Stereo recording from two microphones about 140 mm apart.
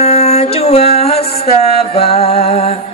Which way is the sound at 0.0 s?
50° left (ahead or behind).